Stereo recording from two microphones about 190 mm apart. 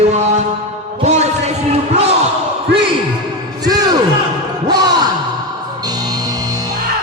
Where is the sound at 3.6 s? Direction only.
20° right (ahead or behind).